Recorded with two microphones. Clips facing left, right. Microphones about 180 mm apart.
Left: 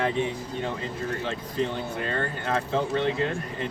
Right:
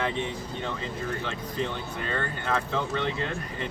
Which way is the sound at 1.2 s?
40° left (ahead or behind).